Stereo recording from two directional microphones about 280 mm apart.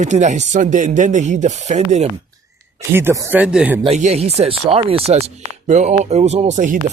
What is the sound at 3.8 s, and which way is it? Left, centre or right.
Speech, right.